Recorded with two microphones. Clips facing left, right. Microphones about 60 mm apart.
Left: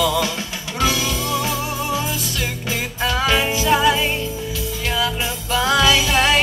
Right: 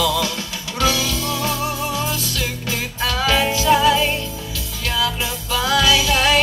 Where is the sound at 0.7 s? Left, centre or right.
Centre.